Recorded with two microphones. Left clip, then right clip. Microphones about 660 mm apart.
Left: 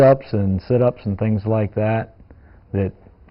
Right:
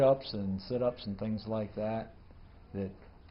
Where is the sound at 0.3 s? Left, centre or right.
Left.